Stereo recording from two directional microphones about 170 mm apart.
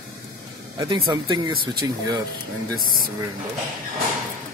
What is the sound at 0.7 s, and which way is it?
Speech, 30° right (ahead or behind).